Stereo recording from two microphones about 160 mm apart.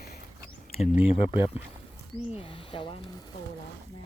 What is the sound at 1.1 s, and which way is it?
Speech, 35° left (ahead or behind).